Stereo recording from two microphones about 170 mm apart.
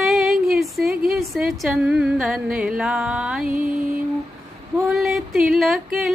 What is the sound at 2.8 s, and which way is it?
Music, 5° right (ahead or behind).